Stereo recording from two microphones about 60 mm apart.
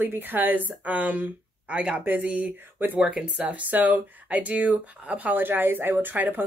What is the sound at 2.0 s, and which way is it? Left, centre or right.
Speech, right.